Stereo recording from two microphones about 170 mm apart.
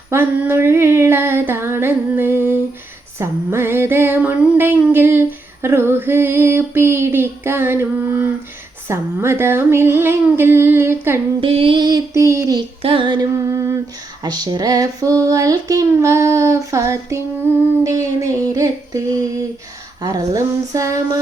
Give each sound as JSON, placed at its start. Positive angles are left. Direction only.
{"t": 0.1, "sound": "female singing", "side_deg": -15}
{"t": 11.3, "sound": "child singing", "side_deg": -30}
{"t": 12.8, "sound": "female singing", "side_deg": -30}
{"t": 14.3, "sound": "child singing", "side_deg": -25}